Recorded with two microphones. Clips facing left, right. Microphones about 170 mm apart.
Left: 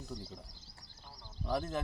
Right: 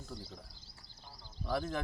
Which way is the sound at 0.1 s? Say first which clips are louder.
Left 2 dB; 15° left (ahead or behind).